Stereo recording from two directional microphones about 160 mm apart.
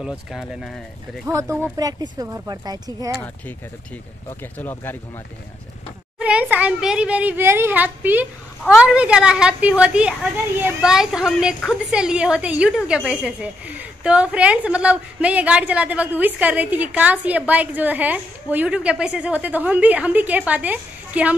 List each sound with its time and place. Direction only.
0.0 s speech: 5° right (ahead or behind)
1.2 s speech: 20° right (ahead or behind)
3.2 s speech: 10° left (ahead or behind)
6.1 s speech: 5° right (ahead or behind)